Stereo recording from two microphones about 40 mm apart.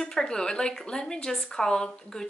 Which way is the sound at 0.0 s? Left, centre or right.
Centre.